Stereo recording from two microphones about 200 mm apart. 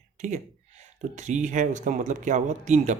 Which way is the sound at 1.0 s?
35° right (ahead or behind).